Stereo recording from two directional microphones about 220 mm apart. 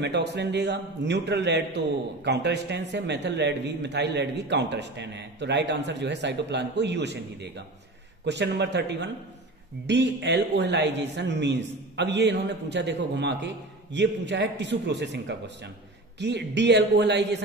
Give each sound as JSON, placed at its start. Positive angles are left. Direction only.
{"t": 0.0, "sound": "a man's voice", "side_deg": -50}